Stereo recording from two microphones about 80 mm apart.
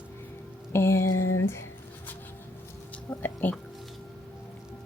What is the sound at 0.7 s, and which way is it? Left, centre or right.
Music, left.